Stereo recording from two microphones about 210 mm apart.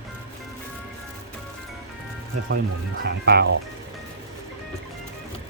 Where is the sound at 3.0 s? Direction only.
50° right (ahead or behind).